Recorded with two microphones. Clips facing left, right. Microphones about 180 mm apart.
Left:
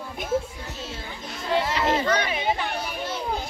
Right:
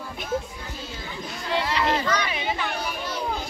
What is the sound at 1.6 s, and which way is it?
Speech, 45° left (ahead or behind).